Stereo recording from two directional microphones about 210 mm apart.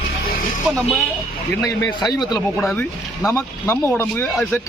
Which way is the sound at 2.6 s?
Centre (ahead or behind).